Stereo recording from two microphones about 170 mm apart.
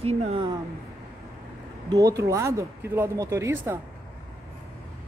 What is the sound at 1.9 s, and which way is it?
Speech, 20° right (ahead or behind).